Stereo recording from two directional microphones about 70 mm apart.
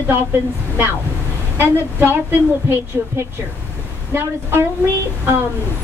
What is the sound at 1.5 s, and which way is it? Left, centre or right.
Speech, right.